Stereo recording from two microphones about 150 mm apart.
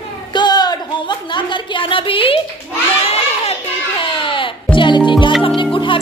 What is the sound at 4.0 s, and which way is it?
Baby cry, 35° left (ahead or behind).